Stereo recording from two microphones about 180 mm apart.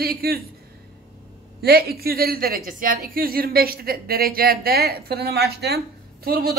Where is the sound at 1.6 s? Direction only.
60° right (ahead or behind).